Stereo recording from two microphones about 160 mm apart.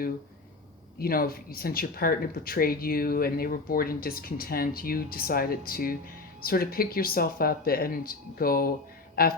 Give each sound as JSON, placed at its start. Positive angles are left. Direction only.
{"t": 0.9, "sound": "speech", "side_deg": 65}